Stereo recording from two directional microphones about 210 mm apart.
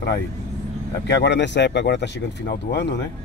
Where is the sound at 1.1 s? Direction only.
55° left (ahead or behind).